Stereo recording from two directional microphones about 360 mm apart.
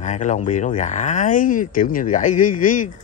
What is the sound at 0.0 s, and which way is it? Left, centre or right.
A man's voice, centre.